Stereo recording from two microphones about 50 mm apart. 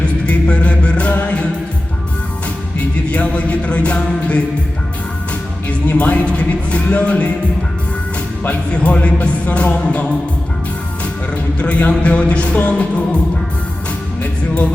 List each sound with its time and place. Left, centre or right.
0.3 s music: left
2.7 s music: left
5.6 s speech: left
8.7 s speech: left
11.6 s speech: left